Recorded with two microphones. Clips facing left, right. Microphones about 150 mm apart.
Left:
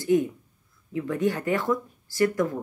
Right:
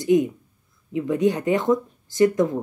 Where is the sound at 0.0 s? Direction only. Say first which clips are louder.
Right 4 dB; 15° right (ahead or behind).